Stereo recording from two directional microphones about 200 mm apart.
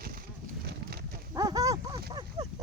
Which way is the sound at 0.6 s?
55° right (ahead or behind).